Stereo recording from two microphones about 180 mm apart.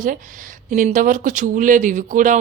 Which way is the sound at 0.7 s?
45° right (ahead or behind).